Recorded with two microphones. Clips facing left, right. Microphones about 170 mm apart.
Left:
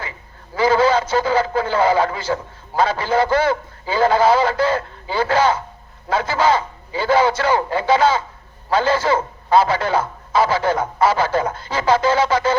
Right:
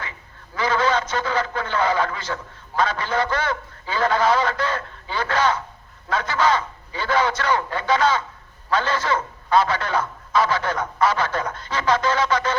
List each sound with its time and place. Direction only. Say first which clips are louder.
0.5 s a man's voice: left 6 dB; 30° left (ahead or behind)